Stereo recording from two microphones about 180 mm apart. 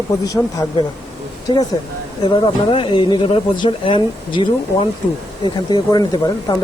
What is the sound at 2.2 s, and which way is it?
Speech, 25° left (ahead or behind).